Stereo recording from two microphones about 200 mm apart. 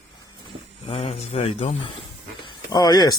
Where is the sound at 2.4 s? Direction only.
20° left (ahead or behind).